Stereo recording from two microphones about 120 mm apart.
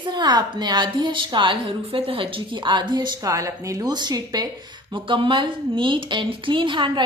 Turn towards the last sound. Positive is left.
turn(degrees=-40)  # may be behind; listen again after turning